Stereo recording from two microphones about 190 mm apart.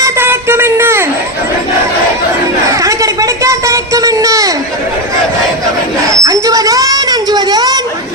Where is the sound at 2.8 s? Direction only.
15° right (ahead or behind).